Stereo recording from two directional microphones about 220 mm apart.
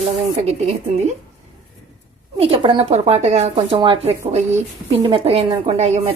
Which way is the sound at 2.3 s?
25° right (ahead or behind).